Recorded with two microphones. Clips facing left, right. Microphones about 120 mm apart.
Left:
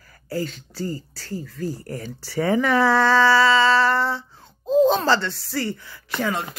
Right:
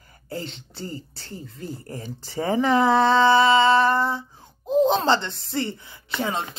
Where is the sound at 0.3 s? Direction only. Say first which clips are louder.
Left 5 dB; 25° right (ahead or behind).